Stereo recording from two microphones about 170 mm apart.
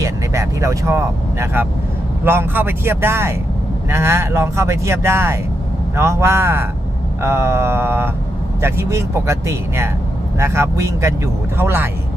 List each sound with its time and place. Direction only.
0.0 s speech: 15° right (ahead or behind)